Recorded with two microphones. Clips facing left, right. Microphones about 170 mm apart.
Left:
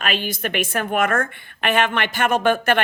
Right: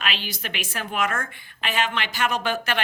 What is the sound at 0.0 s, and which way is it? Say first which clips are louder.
A woman's voice: left 7 dB; 50° left (ahead or behind).